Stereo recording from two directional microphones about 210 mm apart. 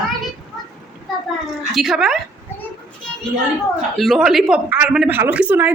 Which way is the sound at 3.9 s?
Centre (ahead or behind).